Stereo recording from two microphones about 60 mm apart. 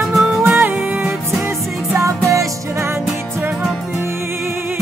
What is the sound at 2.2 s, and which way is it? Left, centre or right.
Music, right.